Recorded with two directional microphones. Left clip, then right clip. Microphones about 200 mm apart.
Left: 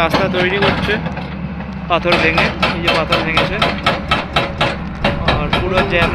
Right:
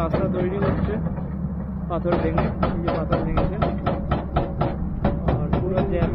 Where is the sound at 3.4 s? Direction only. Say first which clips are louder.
Left 10 dB; 25° left (ahead or behind).